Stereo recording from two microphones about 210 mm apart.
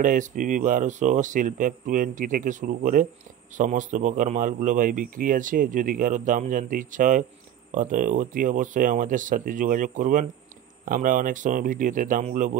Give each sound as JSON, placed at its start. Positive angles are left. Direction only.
{"t": 0.0, "sound": "a man's voice", "side_deg": -40}